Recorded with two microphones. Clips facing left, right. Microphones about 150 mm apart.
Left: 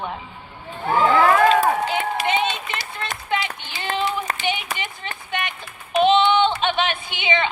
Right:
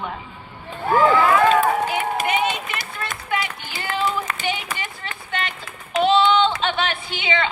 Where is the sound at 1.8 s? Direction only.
25° left (ahead or behind).